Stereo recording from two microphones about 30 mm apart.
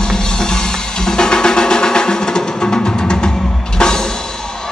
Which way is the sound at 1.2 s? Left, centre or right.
Left.